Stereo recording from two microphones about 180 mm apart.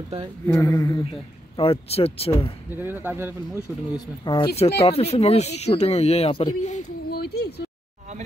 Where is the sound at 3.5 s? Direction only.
20° left (ahead or behind).